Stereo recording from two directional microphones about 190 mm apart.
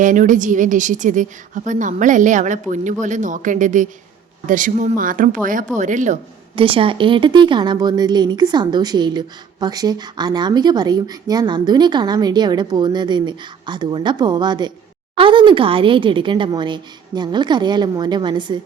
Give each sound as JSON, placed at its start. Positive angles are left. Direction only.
{"t": 0.0, "sound": "a woman's voice", "side_deg": -45}
{"t": 6.6, "sound": "a woman's voice", "side_deg": -30}